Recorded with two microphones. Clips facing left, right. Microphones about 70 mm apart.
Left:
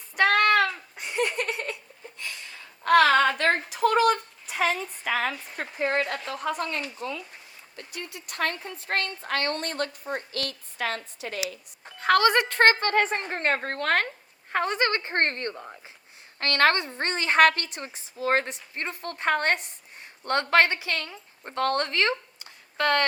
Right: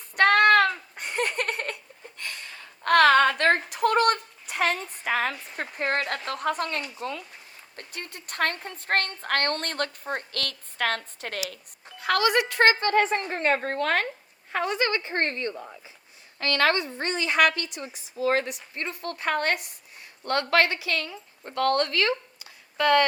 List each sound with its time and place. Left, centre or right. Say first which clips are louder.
0.2 s a sound: right 3 dB; right
7.0 s a woman's voice: even; right
11.9 s a woman's voice: left 2 dB; left
13.0 s a woman's voice: right 2 dB; left